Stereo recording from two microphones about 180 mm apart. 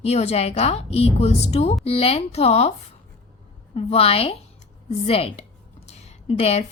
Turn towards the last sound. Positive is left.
turn(degrees=35)  # may be behind; listen again after turning